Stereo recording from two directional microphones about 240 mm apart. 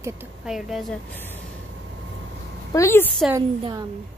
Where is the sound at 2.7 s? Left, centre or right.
Centre.